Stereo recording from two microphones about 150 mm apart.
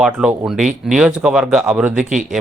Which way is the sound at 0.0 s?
5° right (ahead or behind).